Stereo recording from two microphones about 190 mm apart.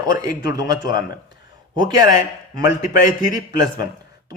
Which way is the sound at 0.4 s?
20° right (ahead or behind).